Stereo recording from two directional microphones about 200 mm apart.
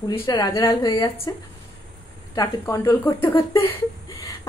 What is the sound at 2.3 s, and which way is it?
A woman's voice, 15° left (ahead or behind).